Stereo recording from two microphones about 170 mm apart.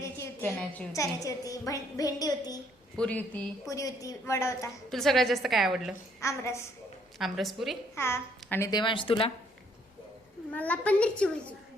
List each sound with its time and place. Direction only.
0.0 s a woman's voice: 15° left (ahead or behind)
3.0 s a woman's voice: 10° left (ahead or behind)
4.9 s a woman's voice: centre (ahead or behind)
6.1 s a woman's voice: 15° left (ahead or behind)
7.2 s a woman's voice: centre (ahead or behind)
7.9 s a woman's voice: 15° left (ahead or behind)
8.7 s a woman's voice: 30° left (ahead or behind)
10.5 s a woman's voice: 10° left (ahead or behind)